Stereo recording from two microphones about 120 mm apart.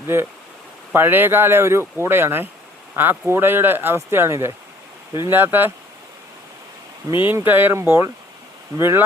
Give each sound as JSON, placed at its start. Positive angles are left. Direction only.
{"t": 0.9, "sound": "speech", "side_deg": -15}
{"t": 7.3, "sound": "speech", "side_deg": -15}